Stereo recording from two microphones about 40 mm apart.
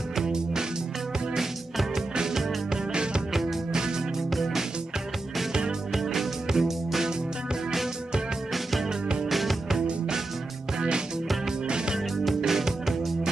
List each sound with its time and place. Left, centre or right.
0.1 s music: centre
4.3 s music: centre
5.4 s music: centre
9.3 s music: centre
11.6 s music: right